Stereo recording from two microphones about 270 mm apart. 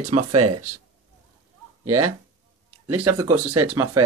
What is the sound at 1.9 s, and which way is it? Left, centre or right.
Speech, right.